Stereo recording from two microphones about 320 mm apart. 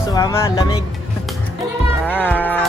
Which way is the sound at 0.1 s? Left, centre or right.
Centre.